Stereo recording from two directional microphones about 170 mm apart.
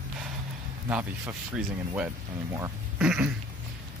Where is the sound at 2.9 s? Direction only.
5° right (ahead or behind).